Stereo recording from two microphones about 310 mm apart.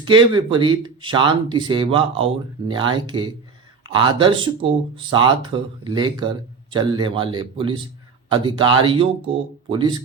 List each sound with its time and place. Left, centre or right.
0.0 s speech: centre